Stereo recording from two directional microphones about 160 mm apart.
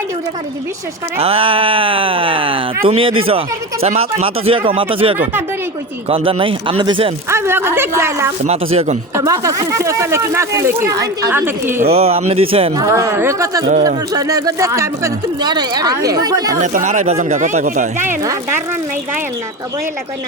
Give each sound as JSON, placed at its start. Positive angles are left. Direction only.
{"t": 1.2, "sound": "speech", "side_deg": -35}
{"t": 7.3, "sound": "speech", "side_deg": -15}
{"t": 8.4, "sound": "speech", "side_deg": -40}
{"t": 9.1, "sound": "speech", "side_deg": -20}
{"t": 11.9, "sound": "speech", "side_deg": -40}
{"t": 12.8, "sound": "speech", "side_deg": -20}
{"t": 16.6, "sound": "speech", "side_deg": -50}
{"t": 18.0, "sound": "speech", "side_deg": -15}